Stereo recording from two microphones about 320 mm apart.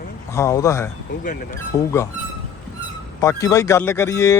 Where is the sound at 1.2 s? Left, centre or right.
Left.